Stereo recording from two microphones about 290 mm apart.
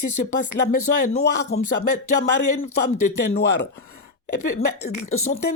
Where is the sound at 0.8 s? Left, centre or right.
Left.